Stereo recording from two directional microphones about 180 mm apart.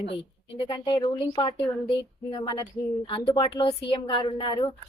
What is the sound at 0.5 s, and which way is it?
A woman's voice, 25° left (ahead or behind).